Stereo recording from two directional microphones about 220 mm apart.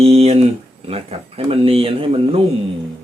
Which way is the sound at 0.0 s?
30° right (ahead or behind).